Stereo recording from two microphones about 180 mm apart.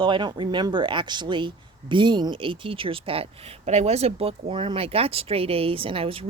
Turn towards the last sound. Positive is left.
turn(degrees=-30)  # may be behind; listen again after turning